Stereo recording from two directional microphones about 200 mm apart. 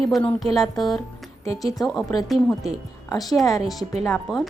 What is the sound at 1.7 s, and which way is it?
Speech, 20° left (ahead or behind).